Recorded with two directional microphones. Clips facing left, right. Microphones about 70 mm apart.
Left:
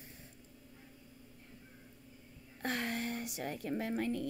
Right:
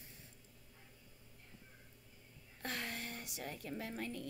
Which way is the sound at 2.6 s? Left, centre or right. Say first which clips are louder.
Left 7 dB; left.